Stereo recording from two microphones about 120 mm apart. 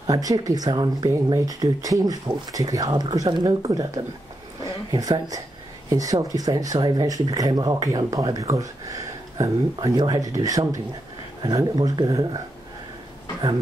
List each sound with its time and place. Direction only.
0.0 s speech: 30° right (ahead or behind)